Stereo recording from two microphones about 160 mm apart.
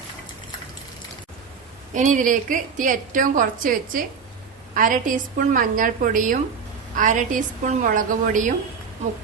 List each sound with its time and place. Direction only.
1.9 s a woman's voice: 50° right (ahead or behind)